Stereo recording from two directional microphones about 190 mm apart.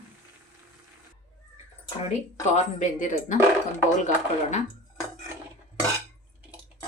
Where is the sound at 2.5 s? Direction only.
40° left (ahead or behind).